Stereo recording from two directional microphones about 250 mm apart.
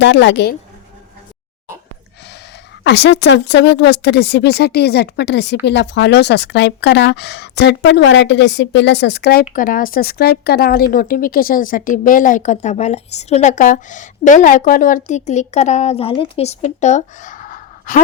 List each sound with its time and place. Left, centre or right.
0.0 s speech: left
2.8 s speech: left